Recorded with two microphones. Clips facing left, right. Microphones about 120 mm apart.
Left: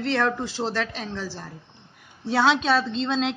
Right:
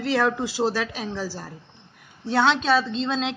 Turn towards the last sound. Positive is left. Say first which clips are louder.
# left 1 dB
turn(degrees=0)  # may be behind; listen again after turning